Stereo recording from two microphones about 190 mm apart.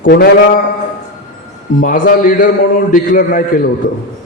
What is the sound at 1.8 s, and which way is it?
A man's voice, 45° left (ahead or behind).